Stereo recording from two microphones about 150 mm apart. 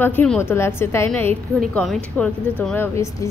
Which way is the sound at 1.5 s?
Centre (ahead or behind).